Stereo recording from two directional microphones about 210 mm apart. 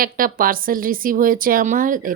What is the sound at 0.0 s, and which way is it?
A woman's voice, 40° right (ahead or behind).